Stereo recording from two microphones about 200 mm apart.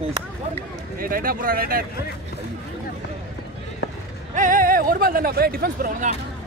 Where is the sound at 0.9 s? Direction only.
45° right (ahead or behind).